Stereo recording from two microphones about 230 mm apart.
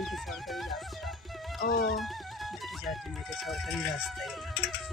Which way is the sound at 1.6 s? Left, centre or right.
Left.